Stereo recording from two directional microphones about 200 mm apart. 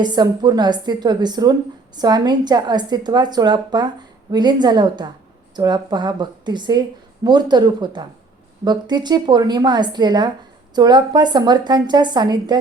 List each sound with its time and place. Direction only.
0.0 s a woman's voice: 20° right (ahead or behind)